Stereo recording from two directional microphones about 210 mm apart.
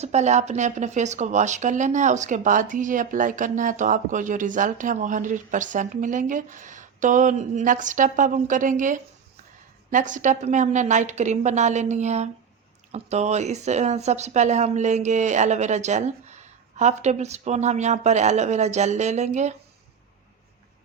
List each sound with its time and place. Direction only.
0.0 s speech: 30° right (ahead or behind)